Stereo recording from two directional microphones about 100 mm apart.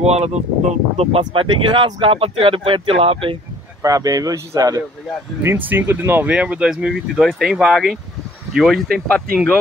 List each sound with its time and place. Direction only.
0.0 s speech: 90° right
0.9 s speech: 70° right (ahead or behind)
3.8 s speech: 35° right (ahead or behind)
5.4 s speech: 20° right (ahead or behind); by 9.6 s 5° left (ahead or behind)